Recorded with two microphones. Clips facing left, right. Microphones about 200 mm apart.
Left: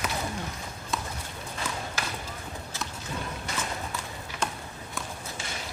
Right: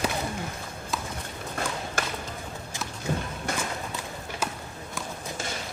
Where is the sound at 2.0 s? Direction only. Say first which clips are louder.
Right 6 dB; 50° right (ahead or behind).